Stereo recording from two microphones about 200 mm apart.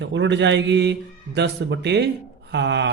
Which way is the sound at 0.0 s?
65° right (ahead or behind).